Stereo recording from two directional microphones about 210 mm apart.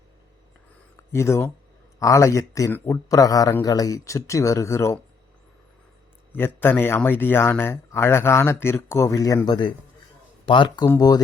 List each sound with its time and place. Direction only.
0.9 s speech: 15° left (ahead or behind)
6.3 s speech: 10° left (ahead or behind)